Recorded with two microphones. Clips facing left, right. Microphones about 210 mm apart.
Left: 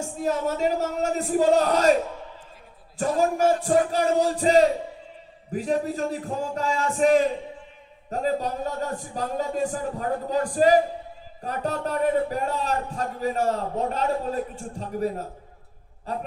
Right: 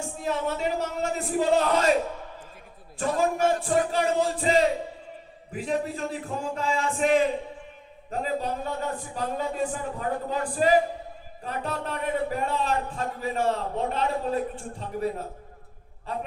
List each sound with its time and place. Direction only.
0.0 s speech: 45° left (ahead or behind)
3.0 s speech: 40° left (ahead or behind)